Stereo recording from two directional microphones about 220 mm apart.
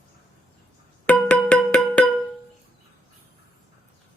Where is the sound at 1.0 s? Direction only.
5° left (ahead or behind).